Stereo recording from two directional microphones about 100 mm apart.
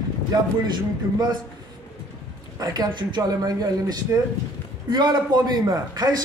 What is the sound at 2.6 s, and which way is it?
A man's voice, 45° right (ahead or behind).